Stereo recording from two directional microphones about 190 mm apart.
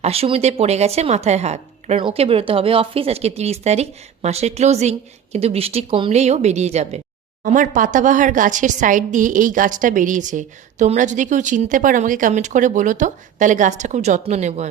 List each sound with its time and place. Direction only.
0.0 s speech: 30° right (ahead or behind)